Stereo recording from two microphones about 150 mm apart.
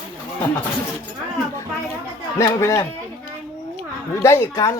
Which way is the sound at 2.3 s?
20° left (ahead or behind).